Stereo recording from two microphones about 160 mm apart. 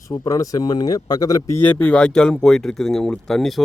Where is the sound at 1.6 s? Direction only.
10° left (ahead or behind).